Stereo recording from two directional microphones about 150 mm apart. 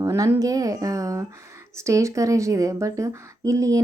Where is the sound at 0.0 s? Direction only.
20° right (ahead or behind).